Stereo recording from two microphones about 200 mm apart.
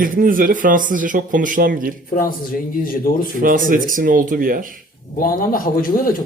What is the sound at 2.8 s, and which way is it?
Speech, 45° left (ahead or behind).